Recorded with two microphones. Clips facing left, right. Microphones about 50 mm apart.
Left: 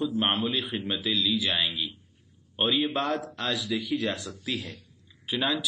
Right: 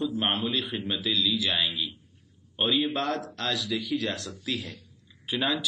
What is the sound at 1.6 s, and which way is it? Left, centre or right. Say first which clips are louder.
Speech: even; centre.